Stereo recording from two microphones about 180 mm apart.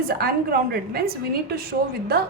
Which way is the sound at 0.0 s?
55° right (ahead or behind).